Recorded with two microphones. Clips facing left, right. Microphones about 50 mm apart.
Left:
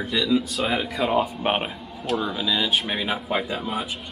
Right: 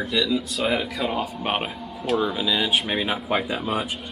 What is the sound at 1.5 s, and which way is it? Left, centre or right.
Speech, left.